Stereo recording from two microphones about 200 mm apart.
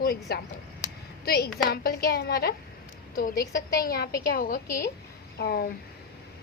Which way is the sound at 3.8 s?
50° left (ahead or behind).